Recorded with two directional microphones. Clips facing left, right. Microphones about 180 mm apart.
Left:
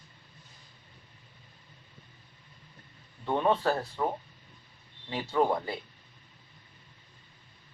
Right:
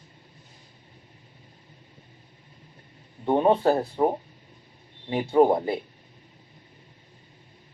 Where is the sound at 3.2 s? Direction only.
30° right (ahead or behind).